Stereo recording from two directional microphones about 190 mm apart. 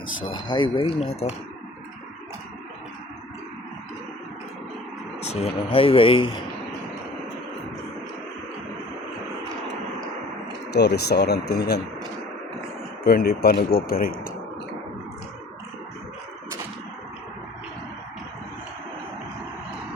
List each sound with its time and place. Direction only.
0.3 s speech: 25° left (ahead or behind)
5.2 s speech: 35° left (ahead or behind)
10.7 s speech: 60° left (ahead or behind)
13.1 s speech: 55° left (ahead or behind)